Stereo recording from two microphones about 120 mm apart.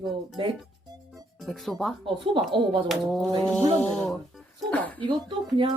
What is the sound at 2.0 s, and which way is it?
Speech, 45° right (ahead or behind).